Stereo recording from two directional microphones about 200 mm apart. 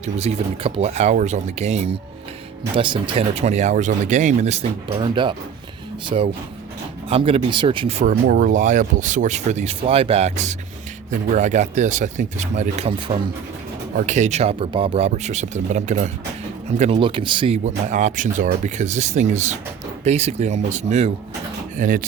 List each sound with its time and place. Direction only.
0.0 s speech: 35° right (ahead or behind)
8.1 s speech: 45° right (ahead or behind)